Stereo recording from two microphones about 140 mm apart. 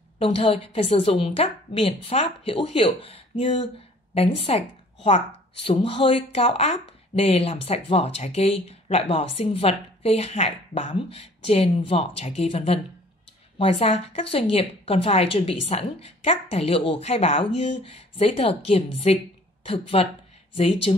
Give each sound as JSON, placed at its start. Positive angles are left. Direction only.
{"t": 0.2, "sound": "a woman's voice", "side_deg": 40}